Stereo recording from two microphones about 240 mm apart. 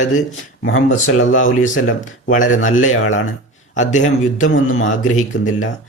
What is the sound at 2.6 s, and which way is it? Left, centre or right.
Speech, left.